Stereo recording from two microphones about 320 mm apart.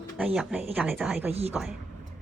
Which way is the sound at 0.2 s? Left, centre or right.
Centre.